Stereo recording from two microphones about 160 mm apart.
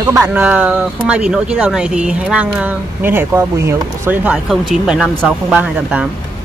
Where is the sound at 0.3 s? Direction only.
10° right (ahead or behind).